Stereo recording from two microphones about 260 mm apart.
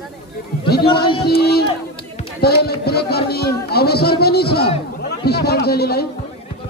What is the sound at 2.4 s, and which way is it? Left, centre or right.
Speech, left.